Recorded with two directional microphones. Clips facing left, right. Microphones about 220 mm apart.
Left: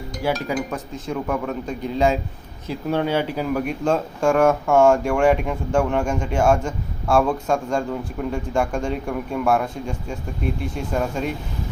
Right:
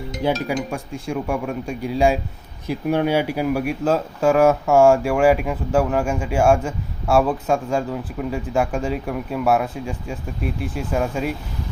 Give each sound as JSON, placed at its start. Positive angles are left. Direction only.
{"t": 0.2, "sound": "speech", "side_deg": -20}
{"t": 0.7, "sound": "speech", "side_deg": -10}